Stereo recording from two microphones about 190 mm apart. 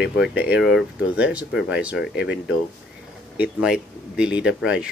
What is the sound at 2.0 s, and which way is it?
Speech, 65° left (ahead or behind).